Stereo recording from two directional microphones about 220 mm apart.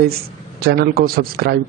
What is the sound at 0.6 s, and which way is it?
Speech, 45° right (ahead or behind).